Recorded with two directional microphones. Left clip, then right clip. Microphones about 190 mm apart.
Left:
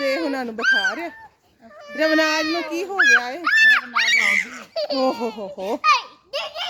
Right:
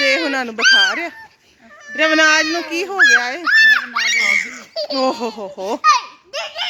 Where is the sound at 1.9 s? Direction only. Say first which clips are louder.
Right 6 dB; 15° left (ahead or behind).